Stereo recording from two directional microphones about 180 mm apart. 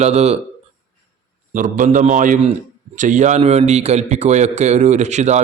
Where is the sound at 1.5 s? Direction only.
45° right (ahead or behind).